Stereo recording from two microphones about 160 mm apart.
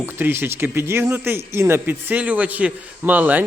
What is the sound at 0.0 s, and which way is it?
A man's voice, 15° right (ahead or behind).